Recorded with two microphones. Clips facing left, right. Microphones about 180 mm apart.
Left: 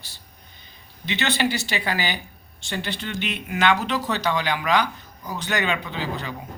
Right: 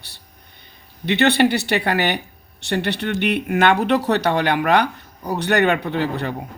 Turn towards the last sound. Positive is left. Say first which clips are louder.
# right 7 dB
turn(degrees=-60)  # may be behind; listen again after turning